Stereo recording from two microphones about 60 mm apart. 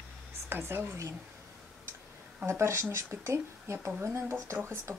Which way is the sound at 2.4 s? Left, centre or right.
Right.